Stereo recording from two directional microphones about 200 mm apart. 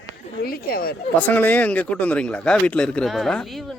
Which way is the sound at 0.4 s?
50° left (ahead or behind).